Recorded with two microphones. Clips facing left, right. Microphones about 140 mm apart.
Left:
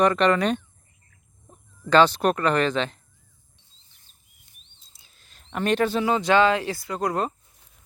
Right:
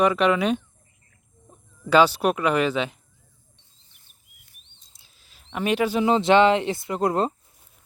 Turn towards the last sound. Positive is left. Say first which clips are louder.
# right 3 dB
turn(degrees=-25)  # may be behind; listen again after turning